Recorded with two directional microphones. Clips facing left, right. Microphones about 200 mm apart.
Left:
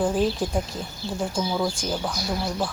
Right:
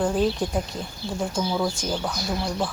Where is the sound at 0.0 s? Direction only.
Centre (ahead or behind).